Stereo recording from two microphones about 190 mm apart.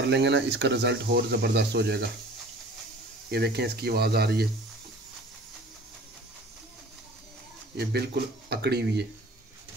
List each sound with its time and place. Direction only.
0.1 s speech: 65° right (ahead or behind)
3.3 s speech: 55° right (ahead or behind)
7.7 s speech: 60° right (ahead or behind)